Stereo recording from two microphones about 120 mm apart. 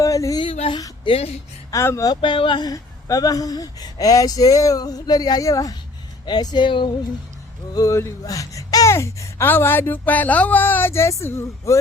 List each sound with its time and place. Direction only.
0.0 s a sound: 30° left (ahead or behind)
1.0 s speech: 55° left (ahead or behind)
1.7 s speech: 25° left (ahead or behind)
2.0 s speech: 45° left (ahead or behind)
7.7 s speech: 30° left (ahead or behind)